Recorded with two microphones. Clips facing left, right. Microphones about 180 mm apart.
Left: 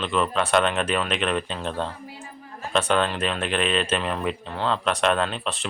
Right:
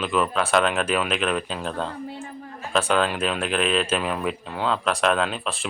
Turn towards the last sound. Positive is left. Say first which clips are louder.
# even
turn(degrees=0)  # may be behind; listen again after turning